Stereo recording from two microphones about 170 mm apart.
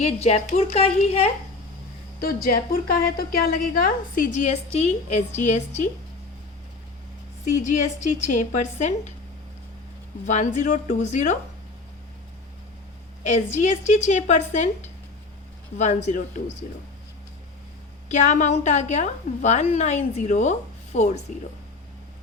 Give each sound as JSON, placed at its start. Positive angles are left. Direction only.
{"t": 0.0, "sound": "a woman's voice", "side_deg": 40}
{"t": 2.2, "sound": "a woman's voice", "side_deg": 60}
{"t": 7.6, "sound": "a woman's voice", "side_deg": 45}
{"t": 10.2, "sound": "a woman's voice", "side_deg": 45}
{"t": 13.2, "sound": "a woman's voice", "side_deg": 45}
{"t": 15.8, "sound": "a woman's voice", "side_deg": 45}
{"t": 18.1, "sound": "a woman's voice", "side_deg": 45}